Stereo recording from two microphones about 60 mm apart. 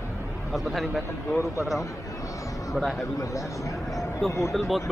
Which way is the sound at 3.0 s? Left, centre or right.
Left.